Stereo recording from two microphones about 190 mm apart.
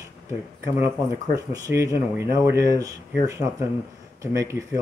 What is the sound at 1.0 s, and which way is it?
Speech, 15° right (ahead or behind).